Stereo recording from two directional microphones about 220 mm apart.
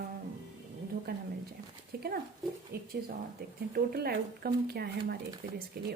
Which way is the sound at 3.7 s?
45° right (ahead or behind).